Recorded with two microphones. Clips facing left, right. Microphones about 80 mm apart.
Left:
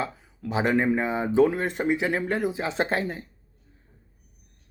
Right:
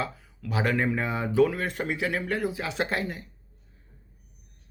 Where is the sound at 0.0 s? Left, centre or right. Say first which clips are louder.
Left 2 dB; left.